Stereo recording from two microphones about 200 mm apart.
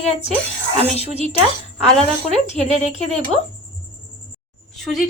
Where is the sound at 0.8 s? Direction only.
30° right (ahead or behind).